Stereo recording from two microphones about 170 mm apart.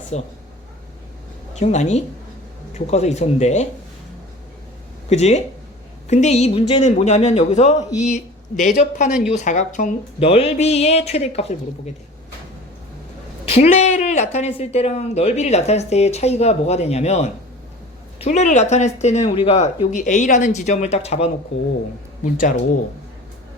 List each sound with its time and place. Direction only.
0.1 s speech: 40° left (ahead or behind)
1.5 s speech: 40° left (ahead or behind)
5.0 s speech: 40° left (ahead or behind)
13.5 s speech: 40° left (ahead or behind)
22.2 s speech: 50° left (ahead or behind)